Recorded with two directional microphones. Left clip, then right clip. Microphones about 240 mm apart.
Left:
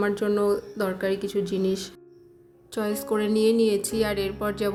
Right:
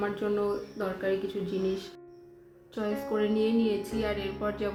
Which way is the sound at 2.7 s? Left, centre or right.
Left.